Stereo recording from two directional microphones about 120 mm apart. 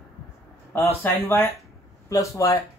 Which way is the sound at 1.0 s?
15° left (ahead or behind).